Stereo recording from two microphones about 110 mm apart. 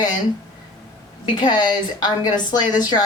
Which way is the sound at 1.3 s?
40° left (ahead or behind).